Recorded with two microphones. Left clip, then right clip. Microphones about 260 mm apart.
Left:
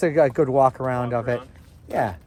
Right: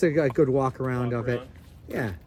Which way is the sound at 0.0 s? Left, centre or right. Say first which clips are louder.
Left 3 dB; centre.